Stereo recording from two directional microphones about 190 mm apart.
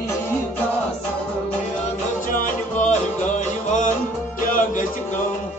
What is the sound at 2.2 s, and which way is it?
Music, 45° left (ahead or behind).